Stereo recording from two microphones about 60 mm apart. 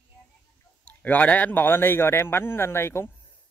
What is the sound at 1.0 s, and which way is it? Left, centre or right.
A man's voice, left.